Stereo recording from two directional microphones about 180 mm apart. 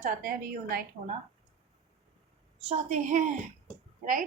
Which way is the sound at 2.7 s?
40° right (ahead or behind).